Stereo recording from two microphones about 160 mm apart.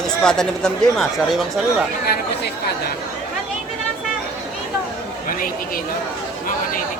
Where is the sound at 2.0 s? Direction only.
80° left.